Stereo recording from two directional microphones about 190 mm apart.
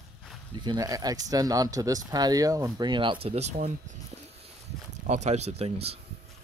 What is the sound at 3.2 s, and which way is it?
Speech, 35° right (ahead or behind).